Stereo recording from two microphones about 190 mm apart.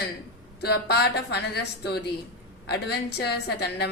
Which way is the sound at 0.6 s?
60° left (ahead or behind).